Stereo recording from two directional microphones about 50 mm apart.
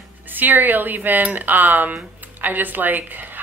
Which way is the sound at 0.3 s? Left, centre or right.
Right.